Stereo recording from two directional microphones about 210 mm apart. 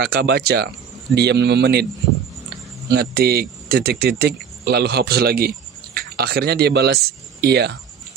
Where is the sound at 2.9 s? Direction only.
50° right (ahead or behind).